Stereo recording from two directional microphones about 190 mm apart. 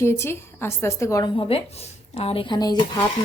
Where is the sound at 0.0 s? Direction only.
15° left (ahead or behind).